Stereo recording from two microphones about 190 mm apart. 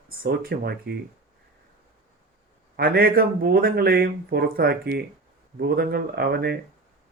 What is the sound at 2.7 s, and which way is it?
A man's voice, 55° right (ahead or behind).